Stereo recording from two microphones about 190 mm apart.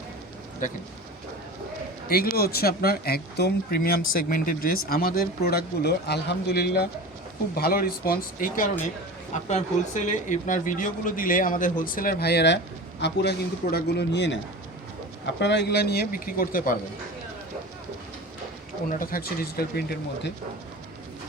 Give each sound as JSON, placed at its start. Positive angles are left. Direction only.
{"t": 0.6, "sound": "speech", "side_deg": 40}
{"t": 2.0, "sound": "a man's voice", "side_deg": 50}
{"t": 15.4, "sound": "a man's voice", "side_deg": 65}
{"t": 18.9, "sound": "speech", "side_deg": 50}